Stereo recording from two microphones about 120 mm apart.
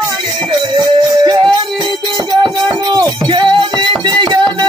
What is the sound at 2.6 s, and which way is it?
Music, 35° right (ahead or behind).